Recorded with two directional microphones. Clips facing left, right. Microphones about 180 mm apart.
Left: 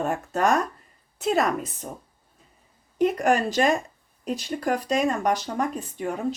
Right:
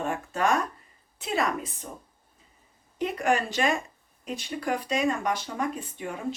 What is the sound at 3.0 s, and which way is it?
Speech, 40° left (ahead or behind).